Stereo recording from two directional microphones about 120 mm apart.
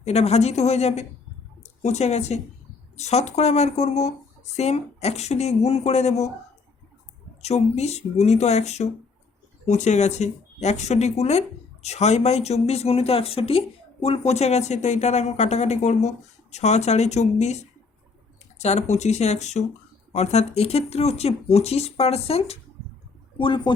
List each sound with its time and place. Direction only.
0.0 s speech: 60° left (ahead or behind)
7.4 s speech: 65° left (ahead or behind)
18.6 s speech: 65° left (ahead or behind)
23.4 s speech: 45° left (ahead or behind)